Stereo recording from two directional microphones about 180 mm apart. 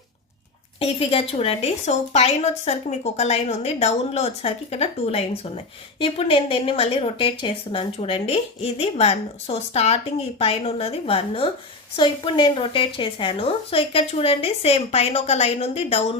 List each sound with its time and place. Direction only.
0.8 s a woman's voice: 35° left (ahead or behind)